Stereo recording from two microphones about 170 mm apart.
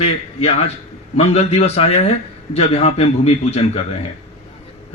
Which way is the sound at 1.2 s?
40° left (ahead or behind).